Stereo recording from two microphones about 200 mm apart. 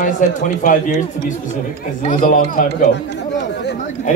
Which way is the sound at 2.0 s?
45° left (ahead or behind).